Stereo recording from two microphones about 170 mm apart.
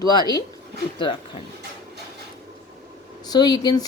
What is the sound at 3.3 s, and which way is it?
Speech, 25° left (ahead or behind).